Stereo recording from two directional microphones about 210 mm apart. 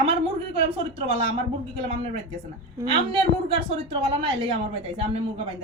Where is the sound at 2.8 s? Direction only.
25° right (ahead or behind).